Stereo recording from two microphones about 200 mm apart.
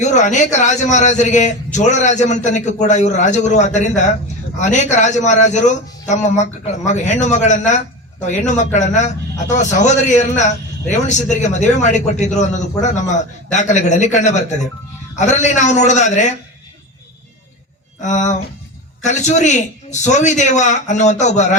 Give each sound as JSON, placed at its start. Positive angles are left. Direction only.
{"t": 0.0, "sound": "a man's voice", "side_deg": 35}
{"t": 18.0, "sound": "a man's voice", "side_deg": 35}